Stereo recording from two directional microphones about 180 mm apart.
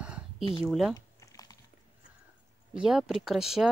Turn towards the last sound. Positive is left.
turn(degrees=0)  # may be behind; listen again after turning